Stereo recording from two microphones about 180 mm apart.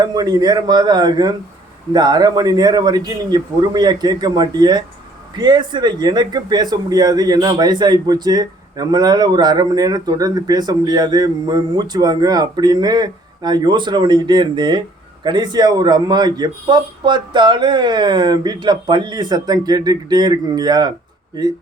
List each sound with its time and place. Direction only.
0.0 s speech: 20° right (ahead or behind)